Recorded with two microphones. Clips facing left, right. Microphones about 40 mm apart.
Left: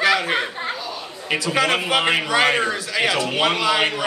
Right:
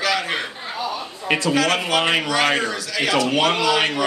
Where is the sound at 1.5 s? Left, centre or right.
Left.